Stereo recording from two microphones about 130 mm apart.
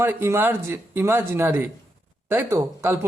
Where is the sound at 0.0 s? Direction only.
15° right (ahead or behind).